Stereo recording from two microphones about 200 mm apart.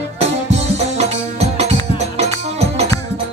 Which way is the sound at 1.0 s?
30° right (ahead or behind).